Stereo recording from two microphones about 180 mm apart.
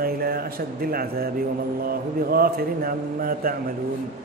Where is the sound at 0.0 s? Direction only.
55° right (ahead or behind).